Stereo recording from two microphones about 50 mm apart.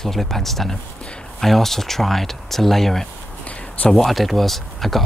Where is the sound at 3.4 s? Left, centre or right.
Left.